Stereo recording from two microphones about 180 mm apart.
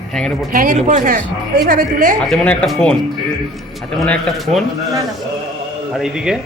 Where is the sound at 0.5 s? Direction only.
45° right (ahead or behind).